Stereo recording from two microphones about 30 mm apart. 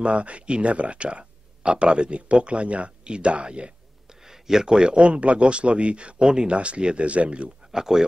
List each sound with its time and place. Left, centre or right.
0.0 s speech: right
4.1 s a sound: centre
4.9 s speech: right
7.7 s speech: centre